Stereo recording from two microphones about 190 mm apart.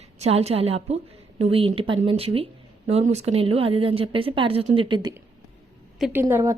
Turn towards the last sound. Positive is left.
turn(degrees=-15)  # may be behind; listen again after turning